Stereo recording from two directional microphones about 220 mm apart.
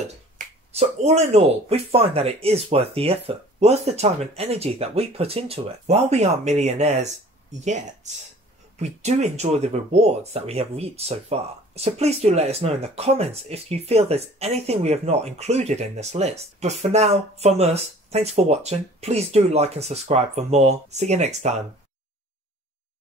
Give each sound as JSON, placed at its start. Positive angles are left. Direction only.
{"t": 0.4, "sound": "finger snapping", "side_deg": -35}
{"t": 0.7, "sound": "speech", "side_deg": -30}